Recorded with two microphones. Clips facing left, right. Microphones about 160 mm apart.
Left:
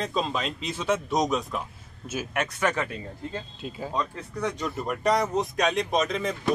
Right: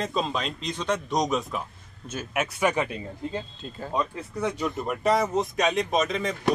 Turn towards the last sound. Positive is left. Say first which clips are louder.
# even
turn(degrees=0)  # may be behind; listen again after turning